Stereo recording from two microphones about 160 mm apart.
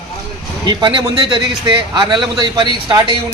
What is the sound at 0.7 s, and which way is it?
A man's voice, 30° right (ahead or behind).